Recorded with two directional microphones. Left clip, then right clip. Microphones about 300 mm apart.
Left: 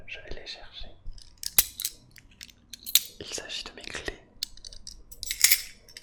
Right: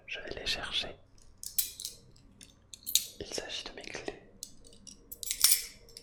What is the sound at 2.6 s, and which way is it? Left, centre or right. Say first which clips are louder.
Chewing: left 6 dB; left.